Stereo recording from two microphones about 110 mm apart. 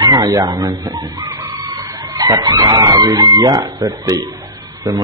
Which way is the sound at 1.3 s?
25° right (ahead or behind).